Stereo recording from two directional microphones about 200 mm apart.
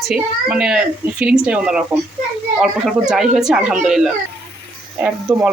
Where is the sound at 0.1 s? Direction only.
5° right (ahead or behind).